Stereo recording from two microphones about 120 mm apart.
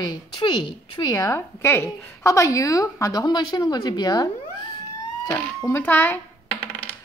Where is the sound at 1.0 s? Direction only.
30° left (ahead or behind).